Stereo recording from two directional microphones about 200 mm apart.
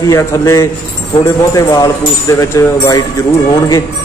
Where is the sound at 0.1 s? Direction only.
15° left (ahead or behind).